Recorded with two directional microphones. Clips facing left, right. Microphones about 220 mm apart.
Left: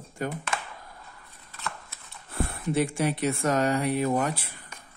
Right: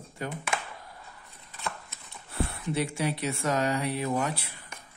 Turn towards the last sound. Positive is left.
turn(degrees=50)  # may be behind; listen again after turning